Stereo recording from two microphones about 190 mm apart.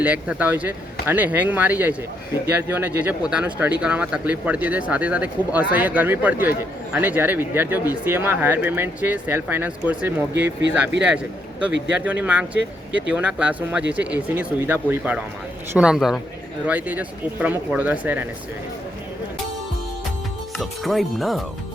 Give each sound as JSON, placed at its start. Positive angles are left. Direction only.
{"t": 0.0, "sound": "speech", "side_deg": -10}
{"t": 13.8, "sound": "speech", "side_deg": -65}
{"t": 14.1, "sound": "speech", "side_deg": -10}
{"t": 20.6, "sound": "speech", "side_deg": 0}